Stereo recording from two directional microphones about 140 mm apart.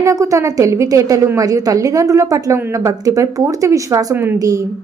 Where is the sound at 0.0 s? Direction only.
25° right (ahead or behind).